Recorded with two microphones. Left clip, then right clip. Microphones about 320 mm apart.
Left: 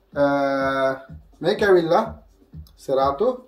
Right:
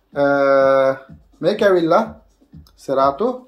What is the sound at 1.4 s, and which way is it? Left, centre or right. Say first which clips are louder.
Speech: right 3 dB; centre.